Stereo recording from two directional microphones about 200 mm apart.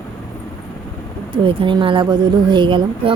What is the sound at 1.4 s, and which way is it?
Speech, 25° right (ahead or behind).